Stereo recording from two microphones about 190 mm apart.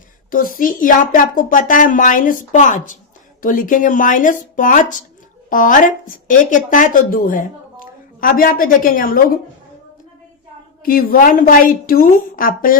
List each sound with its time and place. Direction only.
0.3 s speech: 45° left (ahead or behind)
10.8 s speech: 50° left (ahead or behind)